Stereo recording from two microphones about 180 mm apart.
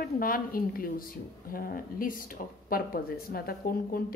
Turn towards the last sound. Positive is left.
turn(degrees=55)  # may be behind; listen again after turning